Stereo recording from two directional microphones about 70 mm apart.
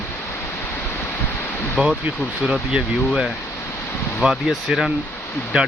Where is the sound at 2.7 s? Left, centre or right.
Centre.